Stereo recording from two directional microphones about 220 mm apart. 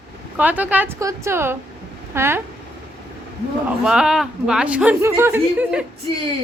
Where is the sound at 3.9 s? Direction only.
5° right (ahead or behind).